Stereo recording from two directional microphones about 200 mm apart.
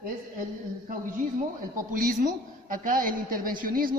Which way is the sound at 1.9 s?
40° right (ahead or behind).